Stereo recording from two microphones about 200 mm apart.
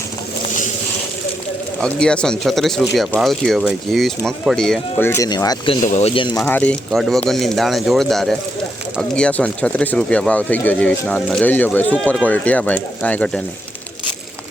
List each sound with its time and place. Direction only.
1.8 s speech: 5° left (ahead or behind); by 5.7 s 20° left (ahead or behind)
5.8 s speech: 35° left (ahead or behind)
6.4 s speech: 5° left (ahead or behind)